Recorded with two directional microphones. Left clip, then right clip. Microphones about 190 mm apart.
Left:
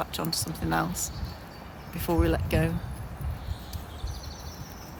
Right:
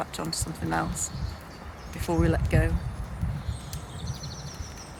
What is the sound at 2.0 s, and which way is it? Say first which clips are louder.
Speech: even; 20° left (ahead or behind).